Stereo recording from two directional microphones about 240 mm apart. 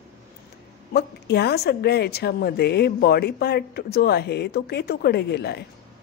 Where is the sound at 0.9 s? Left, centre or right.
Left.